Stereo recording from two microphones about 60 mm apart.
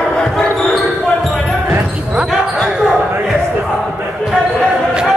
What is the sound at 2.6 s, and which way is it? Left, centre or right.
Basketball bounce, centre.